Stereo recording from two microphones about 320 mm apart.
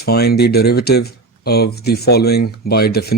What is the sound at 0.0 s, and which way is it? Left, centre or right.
Speech, left.